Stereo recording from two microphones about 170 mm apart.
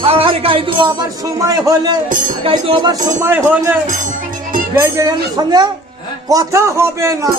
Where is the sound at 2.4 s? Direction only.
30° right (ahead or behind).